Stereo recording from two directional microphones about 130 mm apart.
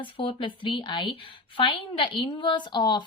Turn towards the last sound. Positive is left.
turn(degrees=35)  # may be behind; listen again after turning